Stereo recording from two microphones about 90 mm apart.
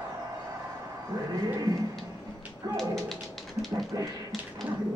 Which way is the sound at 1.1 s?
40° right (ahead or behind).